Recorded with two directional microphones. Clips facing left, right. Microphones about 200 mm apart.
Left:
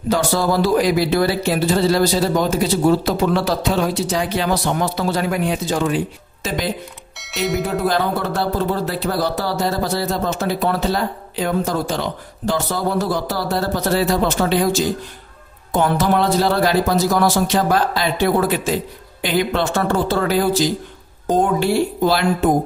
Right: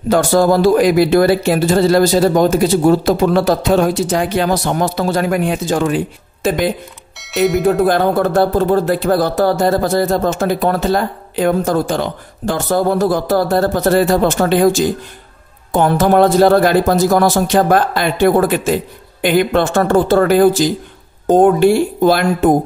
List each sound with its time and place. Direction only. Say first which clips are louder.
0.1 s speech: right 6 dB; 50° right (ahead or behind)
7.2 s music: right 7 dB; centre (ahead or behind)
7.6 s speech: right 7 dB; 50° right (ahead or behind)